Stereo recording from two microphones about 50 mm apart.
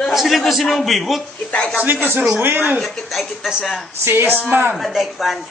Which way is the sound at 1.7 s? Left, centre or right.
Right.